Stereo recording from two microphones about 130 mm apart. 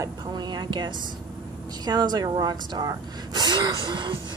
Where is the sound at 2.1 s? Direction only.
30° right (ahead or behind).